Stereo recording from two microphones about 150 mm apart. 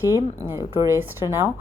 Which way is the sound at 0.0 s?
15° right (ahead or behind).